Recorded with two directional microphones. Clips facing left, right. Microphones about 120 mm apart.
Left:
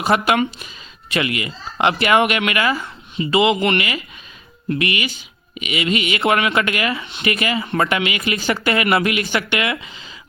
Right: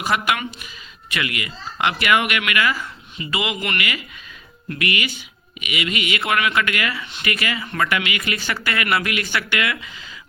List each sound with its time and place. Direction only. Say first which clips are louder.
0.0 s speech: left 5 dB; 30° left (ahead or behind)